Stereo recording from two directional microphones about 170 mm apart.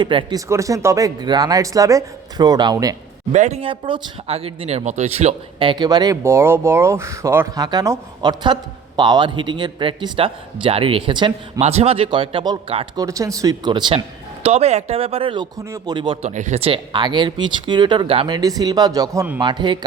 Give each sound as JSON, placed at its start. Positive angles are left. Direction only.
{"t": 0.0, "sound": "speech", "side_deg": -30}
{"t": 3.3, "sound": "speech", "side_deg": -40}
{"t": 14.4, "sound": "speech", "side_deg": -40}
{"t": 16.2, "sound": "speech", "side_deg": -45}
{"t": 19.4, "sound": "speech", "side_deg": -25}